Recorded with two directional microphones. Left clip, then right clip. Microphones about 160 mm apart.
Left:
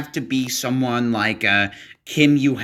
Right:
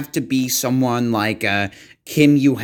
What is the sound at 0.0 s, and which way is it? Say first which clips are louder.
Speech: right 3 dB; 50° right (ahead or behind).